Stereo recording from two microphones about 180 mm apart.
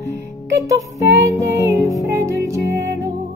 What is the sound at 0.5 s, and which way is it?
Music, 20° right (ahead or behind).